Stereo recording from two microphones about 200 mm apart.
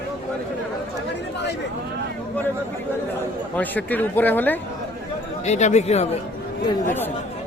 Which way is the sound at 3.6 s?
10° left (ahead or behind).